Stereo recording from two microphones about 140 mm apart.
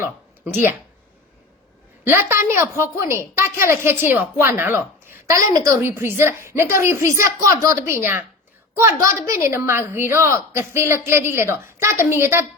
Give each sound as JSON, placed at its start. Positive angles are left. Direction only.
{"t": 0.0, "sound": "speech", "side_deg": -15}
{"t": 2.0, "sound": "a woman's voice", "side_deg": -15}